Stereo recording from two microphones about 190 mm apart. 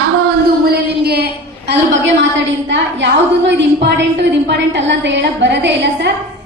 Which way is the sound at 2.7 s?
70° right (ahead or behind).